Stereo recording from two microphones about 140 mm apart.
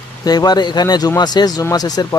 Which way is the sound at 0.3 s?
30° left (ahead or behind).